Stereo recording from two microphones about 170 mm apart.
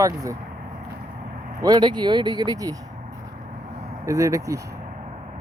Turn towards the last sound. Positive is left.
turn(degrees=-20)  # may be behind; listen again after turning